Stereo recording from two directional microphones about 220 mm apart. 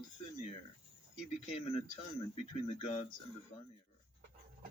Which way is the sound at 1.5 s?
25° left (ahead or behind).